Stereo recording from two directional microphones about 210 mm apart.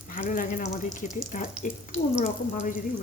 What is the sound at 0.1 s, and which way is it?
Speech, 40° left (ahead or behind).